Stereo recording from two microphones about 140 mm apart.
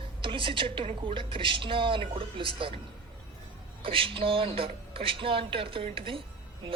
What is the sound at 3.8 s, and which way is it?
A woman's voice, 40° right (ahead or behind).